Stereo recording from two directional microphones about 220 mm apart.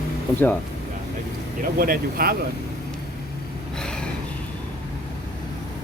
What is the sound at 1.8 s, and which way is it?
Speech, 40° right (ahead or behind).